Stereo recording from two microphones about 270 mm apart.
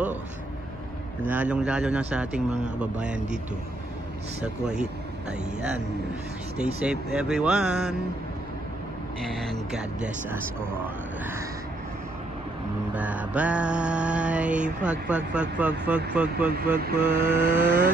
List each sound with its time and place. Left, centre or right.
1.2 s speech: centre
4.4 s speech: centre
6.6 s speech: centre
9.2 s speech: centre
12.9 s mantra: centre
14.9 s speech: centre
16.7 s mantra: right